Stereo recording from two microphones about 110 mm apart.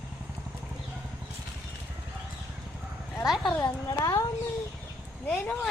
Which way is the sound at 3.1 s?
Centre (ahead or behind).